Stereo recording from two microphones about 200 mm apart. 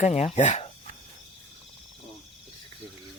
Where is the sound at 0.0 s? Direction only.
35° left (ahead or behind).